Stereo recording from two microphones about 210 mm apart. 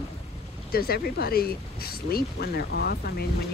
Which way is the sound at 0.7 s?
45° left (ahead or behind).